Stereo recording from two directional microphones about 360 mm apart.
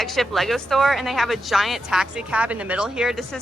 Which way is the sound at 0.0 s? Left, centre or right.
Centre.